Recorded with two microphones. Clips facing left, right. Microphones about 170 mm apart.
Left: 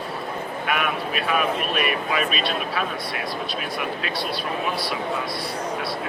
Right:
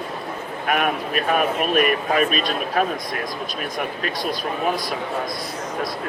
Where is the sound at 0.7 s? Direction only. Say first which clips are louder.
Right 4 dB; 45° right (ahead or behind).